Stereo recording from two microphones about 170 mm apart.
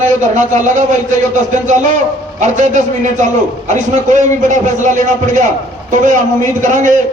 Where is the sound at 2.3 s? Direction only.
45° right (ahead or behind).